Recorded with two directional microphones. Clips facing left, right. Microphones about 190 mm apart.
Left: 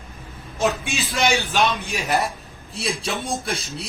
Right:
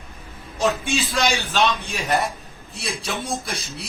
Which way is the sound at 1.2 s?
15° left (ahead or behind).